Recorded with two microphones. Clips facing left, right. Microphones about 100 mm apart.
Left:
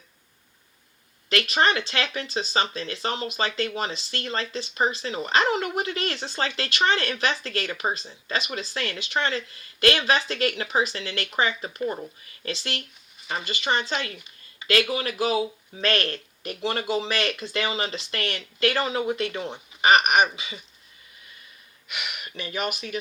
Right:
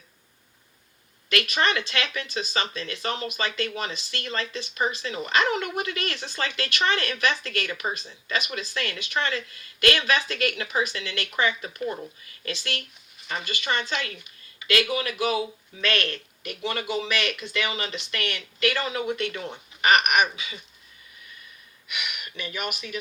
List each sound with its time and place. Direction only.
1.3 s speech: 30° left (ahead or behind)
21.8 s speech: 30° left (ahead or behind)